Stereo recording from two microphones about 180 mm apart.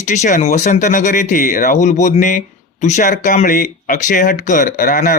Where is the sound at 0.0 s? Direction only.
40° left (ahead or behind).